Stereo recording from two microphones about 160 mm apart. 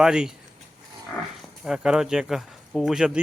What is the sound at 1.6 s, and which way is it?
Speech, 5° right (ahead or behind).